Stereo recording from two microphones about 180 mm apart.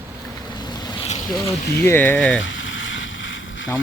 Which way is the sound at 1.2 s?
25° left (ahead or behind).